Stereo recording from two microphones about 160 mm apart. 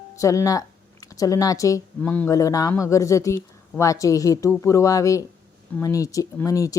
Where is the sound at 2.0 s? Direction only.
10° left (ahead or behind).